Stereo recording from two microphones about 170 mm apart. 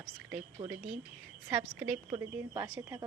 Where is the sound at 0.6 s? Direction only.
30° right (ahead or behind).